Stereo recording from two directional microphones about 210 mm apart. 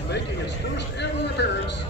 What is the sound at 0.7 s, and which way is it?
Speech, 55° left (ahead or behind).